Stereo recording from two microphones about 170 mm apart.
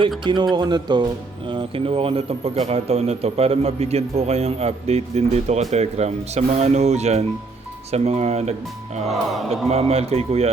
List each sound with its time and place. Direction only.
0.3 s a man's voice: 25° right (ahead or behind)